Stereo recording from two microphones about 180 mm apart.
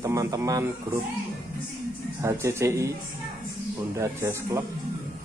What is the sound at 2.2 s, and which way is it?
Speech, 15° right (ahead or behind).